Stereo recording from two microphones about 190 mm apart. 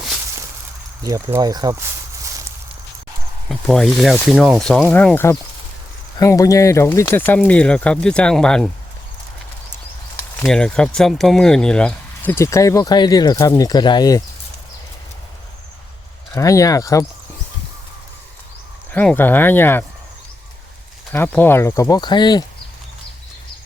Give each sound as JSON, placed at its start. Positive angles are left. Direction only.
{"t": 1.0, "sound": "speech", "side_deg": -15}
{"t": 3.5, "sound": "speech", "side_deg": 0}
{"t": 10.4, "sound": "speech", "side_deg": 5}
{"t": 16.3, "sound": "speech", "side_deg": 15}
{"t": 18.9, "sound": "speech", "side_deg": 10}
{"t": 21.1, "sound": "speech", "side_deg": 10}